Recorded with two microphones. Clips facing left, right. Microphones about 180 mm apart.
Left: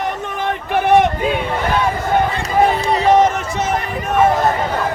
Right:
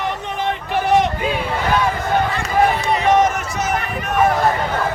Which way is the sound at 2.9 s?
30° left (ahead or behind).